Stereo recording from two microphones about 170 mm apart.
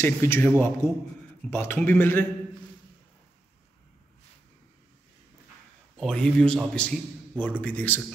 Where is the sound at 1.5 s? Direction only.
10° left (ahead or behind).